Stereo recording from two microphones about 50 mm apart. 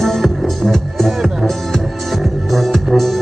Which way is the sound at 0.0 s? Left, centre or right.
Centre.